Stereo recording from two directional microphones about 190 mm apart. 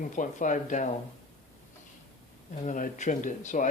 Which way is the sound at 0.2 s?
40° left (ahead or behind).